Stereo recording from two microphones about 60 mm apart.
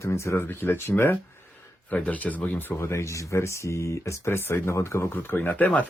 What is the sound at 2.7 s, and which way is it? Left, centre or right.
Speech, left.